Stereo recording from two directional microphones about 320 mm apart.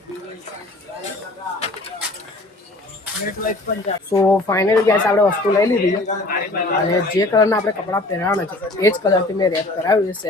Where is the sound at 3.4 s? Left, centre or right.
Left.